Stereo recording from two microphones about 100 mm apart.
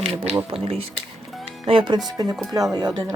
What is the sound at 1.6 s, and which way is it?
Speech, 55° right (ahead or behind).